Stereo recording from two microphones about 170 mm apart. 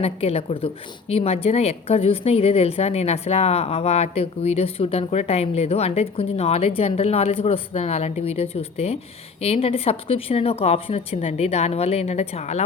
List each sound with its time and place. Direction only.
0.0 s a woman's voice: 35° left (ahead or behind)